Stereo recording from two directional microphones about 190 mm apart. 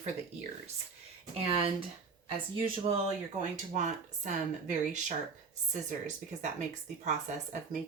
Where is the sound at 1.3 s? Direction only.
30° right (ahead or behind).